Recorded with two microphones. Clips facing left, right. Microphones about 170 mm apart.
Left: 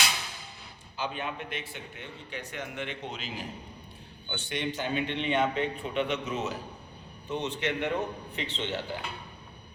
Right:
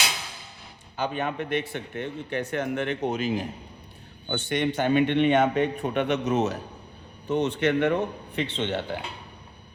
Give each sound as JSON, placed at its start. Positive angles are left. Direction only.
{"t": 0.9, "sound": "a man's voice", "side_deg": -50}
{"t": 7.3, "sound": "a man's voice", "side_deg": -50}